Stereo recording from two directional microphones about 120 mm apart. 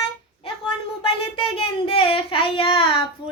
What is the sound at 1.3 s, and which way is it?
Child singing, 50° left (ahead or behind).